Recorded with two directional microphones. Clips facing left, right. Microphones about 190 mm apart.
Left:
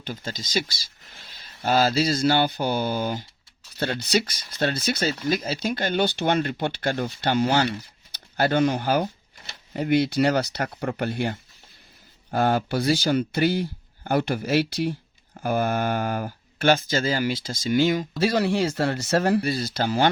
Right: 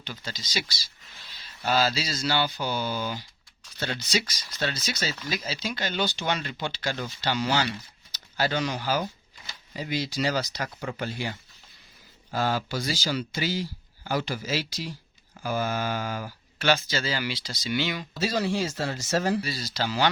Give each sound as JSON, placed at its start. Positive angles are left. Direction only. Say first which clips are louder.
{"t": 0.0, "sound": "speech", "louder": "left 6 dB", "side_deg": 50}